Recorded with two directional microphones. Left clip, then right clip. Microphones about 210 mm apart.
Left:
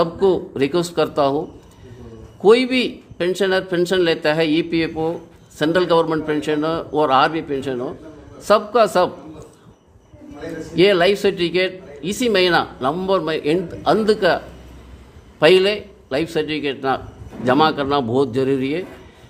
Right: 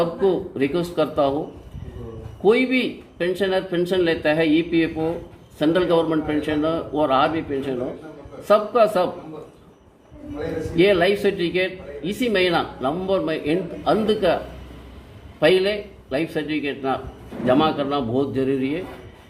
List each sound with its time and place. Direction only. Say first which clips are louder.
0.0 s speech: left 3 dB; 55° left (ahead or behind)
2.4 s speech: left 4 dB; 60° left (ahead or behind)
10.8 s speech: left 3 dB; 55° left (ahead or behind)
15.4 s speech: left 4 dB; 55° left (ahead or behind)